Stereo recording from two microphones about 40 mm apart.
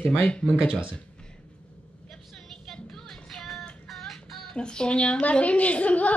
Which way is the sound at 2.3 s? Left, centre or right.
Centre.